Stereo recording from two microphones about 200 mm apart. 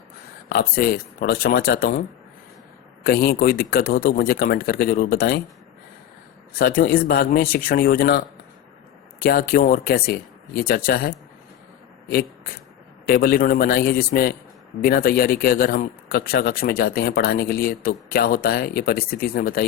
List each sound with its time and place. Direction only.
0.4 s a man's voice: 50° left (ahead or behind)
6.5 s a man's voice: 45° left (ahead or behind)
9.2 s a man's voice: 45° left (ahead or behind)
13.1 s a man's voice: 50° left (ahead or behind)